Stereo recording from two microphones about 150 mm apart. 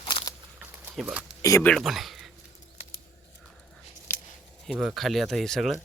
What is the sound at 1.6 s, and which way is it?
Speech, centre (ahead or behind).